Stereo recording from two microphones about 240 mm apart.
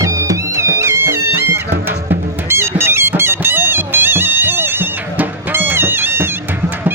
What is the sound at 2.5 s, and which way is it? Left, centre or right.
Music, centre.